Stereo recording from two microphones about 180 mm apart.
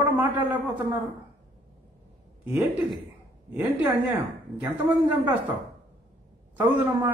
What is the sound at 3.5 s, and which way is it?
A man's voice, 10° right (ahead or behind).